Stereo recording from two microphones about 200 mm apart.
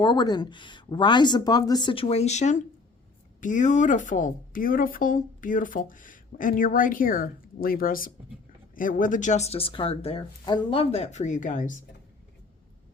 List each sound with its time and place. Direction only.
0.0 s speech: 20° left (ahead or behind); by 11.7 s 40° left (ahead or behind)